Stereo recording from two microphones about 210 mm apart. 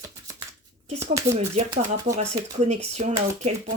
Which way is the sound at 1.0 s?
15° right (ahead or behind).